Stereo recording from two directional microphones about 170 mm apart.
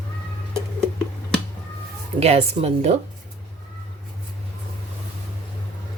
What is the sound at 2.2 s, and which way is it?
Speech, 40° right (ahead or behind).